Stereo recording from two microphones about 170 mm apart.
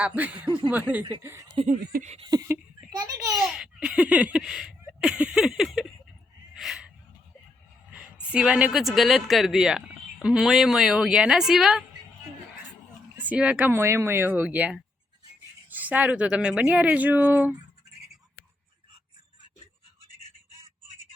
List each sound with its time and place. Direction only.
0.0 s speech: 10° right (ahead or behind)
1.6 s speech: 50° right (ahead or behind)
2.5 s a sound: 20° right (ahead or behind)
3.2 s speech: centre (ahead or behind)
6.5 s a sound: centre (ahead or behind)
7.9 s a woman's voice: 5° right (ahead or behind)
13.1 s speech: 10° right (ahead or behind)